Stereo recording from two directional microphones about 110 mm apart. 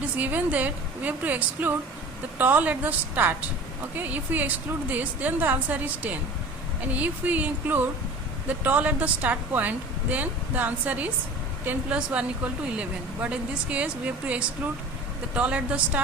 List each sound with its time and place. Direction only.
0.2 s a woman's voice: 15° right (ahead or behind)
6.9 s a woman's voice: 15° right (ahead or behind)
13.2 s a woman's voice: 10° right (ahead or behind)